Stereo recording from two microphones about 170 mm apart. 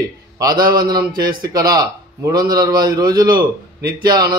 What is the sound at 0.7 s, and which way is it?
A man's voice, 25° right (ahead or behind).